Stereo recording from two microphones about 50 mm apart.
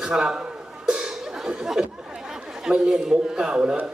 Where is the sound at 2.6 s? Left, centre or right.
Centre.